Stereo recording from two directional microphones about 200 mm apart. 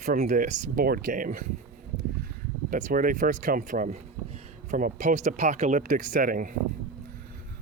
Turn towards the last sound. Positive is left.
turn(degrees=-45)  # may be behind; listen again after turning